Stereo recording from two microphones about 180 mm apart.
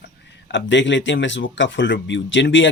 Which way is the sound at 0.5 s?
90° left.